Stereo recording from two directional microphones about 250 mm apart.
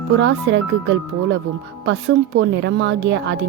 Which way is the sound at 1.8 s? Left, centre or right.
Right.